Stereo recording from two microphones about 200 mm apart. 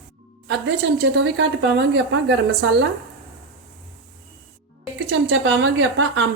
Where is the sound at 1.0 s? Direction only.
60° right (ahead or behind).